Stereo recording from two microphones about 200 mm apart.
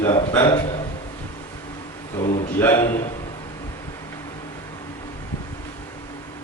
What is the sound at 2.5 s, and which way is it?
Speech, 10° left (ahead or behind).